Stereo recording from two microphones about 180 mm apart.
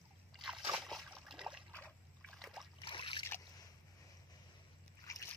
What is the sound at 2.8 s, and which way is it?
Boat, 30° left (ahead or behind).